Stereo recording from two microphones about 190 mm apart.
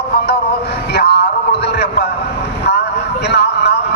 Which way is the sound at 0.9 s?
60° left (ahead or behind).